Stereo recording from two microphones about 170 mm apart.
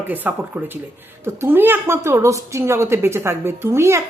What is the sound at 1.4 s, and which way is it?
A woman's voice, 10° right (ahead or behind).